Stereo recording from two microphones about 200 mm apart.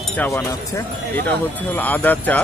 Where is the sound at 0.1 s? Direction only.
10° left (ahead or behind).